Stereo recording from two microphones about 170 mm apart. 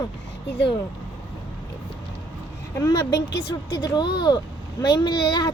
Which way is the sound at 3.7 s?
25° left (ahead or behind).